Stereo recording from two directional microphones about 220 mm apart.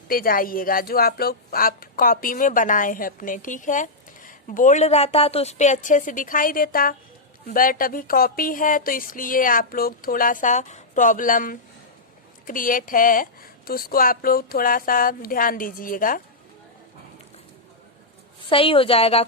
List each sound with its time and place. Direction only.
0.1 s speech: 40° left (ahead or behind)
18.4 s a woman's voice: 25° left (ahead or behind)